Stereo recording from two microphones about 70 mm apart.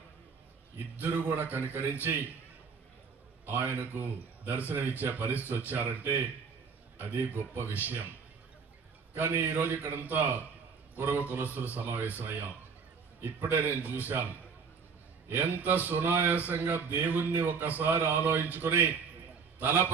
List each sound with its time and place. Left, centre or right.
0.9 s a man's voice: right
3.4 s a man's voice: right
7.0 s a man's voice: right
9.1 s a man's voice: right
15.2 s a man's voice: right